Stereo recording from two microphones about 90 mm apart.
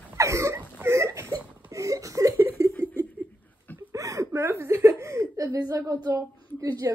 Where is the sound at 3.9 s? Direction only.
40° right (ahead or behind).